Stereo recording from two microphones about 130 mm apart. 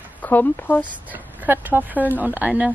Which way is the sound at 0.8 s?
15° right (ahead or behind).